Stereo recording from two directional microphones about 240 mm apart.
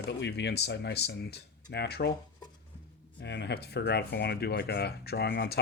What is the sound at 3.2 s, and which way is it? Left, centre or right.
Speech, left.